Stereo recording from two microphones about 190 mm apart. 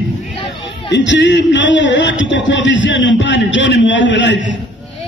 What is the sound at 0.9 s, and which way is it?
A man's voice, 70° left (ahead or behind).